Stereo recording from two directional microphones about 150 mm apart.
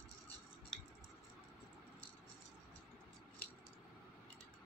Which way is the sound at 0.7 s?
5° left (ahead or behind).